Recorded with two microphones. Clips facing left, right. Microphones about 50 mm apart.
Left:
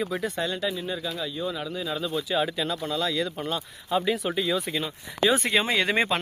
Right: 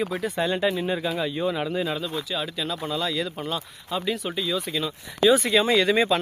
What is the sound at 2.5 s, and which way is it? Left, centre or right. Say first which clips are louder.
Speech: even; centre.